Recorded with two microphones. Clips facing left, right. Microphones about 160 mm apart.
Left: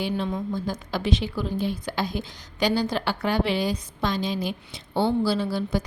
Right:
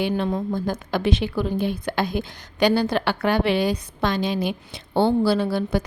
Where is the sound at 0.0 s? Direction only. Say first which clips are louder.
Right 4 dB; 55° right (ahead or behind).